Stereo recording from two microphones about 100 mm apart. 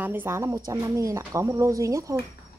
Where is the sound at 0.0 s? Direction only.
20° right (ahead or behind).